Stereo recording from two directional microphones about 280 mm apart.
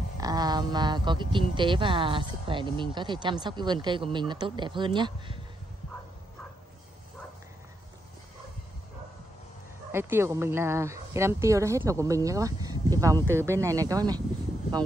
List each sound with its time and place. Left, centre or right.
0.2 s speech: centre
9.8 s speech: centre